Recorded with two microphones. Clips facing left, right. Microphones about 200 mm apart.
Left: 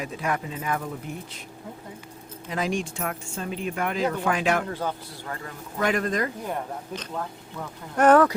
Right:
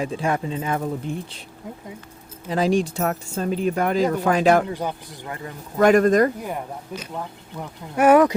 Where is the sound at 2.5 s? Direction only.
35° right (ahead or behind).